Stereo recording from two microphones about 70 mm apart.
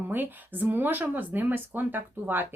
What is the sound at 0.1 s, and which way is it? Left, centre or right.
Speech, right.